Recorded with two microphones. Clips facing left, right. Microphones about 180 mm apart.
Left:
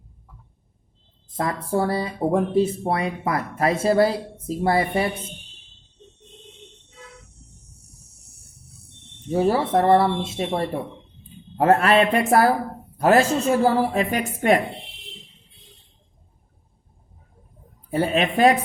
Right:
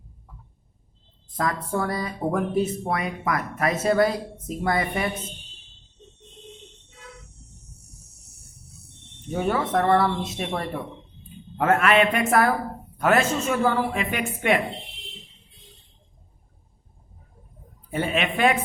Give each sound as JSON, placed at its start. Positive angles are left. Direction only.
{"t": 1.4, "sound": "speech", "side_deg": 30}
{"t": 9.3, "sound": "speech", "side_deg": 35}
{"t": 17.9, "sound": "speech", "side_deg": 35}